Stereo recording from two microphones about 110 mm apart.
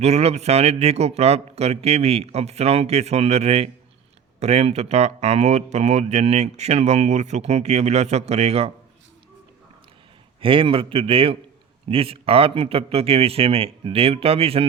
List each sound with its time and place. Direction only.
0.0 s a man's voice: 75° right (ahead or behind)
10.4 s a man's voice: 55° right (ahead or behind)